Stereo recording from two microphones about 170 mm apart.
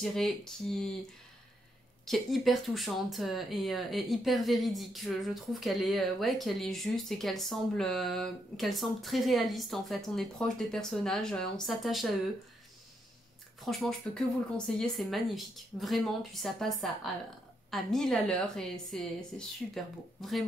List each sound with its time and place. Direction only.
0.0 s speech: centre (ahead or behind)
2.0 s speech: centre (ahead or behind)
13.7 s speech: 5° left (ahead or behind)